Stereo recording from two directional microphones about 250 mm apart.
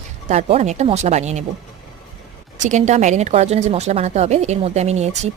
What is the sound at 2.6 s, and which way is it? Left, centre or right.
Speech, right.